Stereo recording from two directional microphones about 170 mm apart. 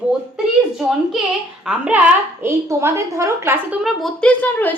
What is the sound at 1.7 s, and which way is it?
A woman's voice, 5° right (ahead or behind).